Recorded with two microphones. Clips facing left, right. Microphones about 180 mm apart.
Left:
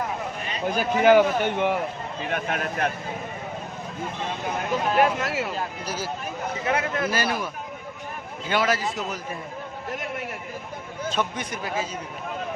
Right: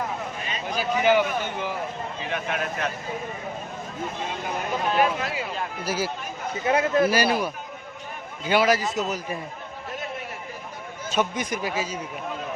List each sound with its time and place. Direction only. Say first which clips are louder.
0.8 s a man's voice: left 4 dB; 55° left (ahead or behind)
2.3 s speech: left 1 dB; 50° left (ahead or behind)
4.9 s speech: left 2 dB; 75° left (ahead or behind)
5.8 s speech: right 4 dB; 10° right (ahead or behind)
6.7 s a man's voice: right 6 dB; 25° right (ahead or behind)
7.1 s speech: right 4 dB; 15° right (ahead or behind)
11.1 s speech: right 4 dB; 5° right (ahead or behind)